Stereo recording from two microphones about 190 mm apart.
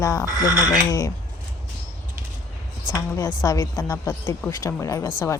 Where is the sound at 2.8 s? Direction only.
20° left (ahead or behind).